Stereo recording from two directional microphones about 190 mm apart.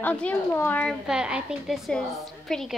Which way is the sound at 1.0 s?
5° right (ahead or behind).